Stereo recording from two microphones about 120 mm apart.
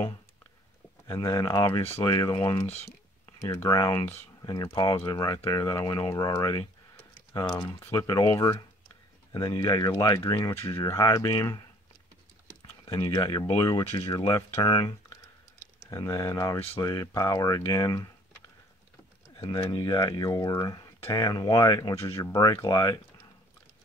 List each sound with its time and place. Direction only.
1.0 s speech: 30° left (ahead or behind)
2.6 s speech: 60° left (ahead or behind)
3.3 s speech: 25° left (ahead or behind)
10.5 s speech: 20° left (ahead or behind)
12.8 s speech: 25° left (ahead or behind)
14.6 s speech: 40° left (ahead or behind)
15.8 s speech: 30° left (ahead or behind)
19.3 s speech: 35° left (ahead or behind)